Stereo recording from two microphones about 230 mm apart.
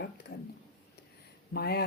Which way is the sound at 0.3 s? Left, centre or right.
Left.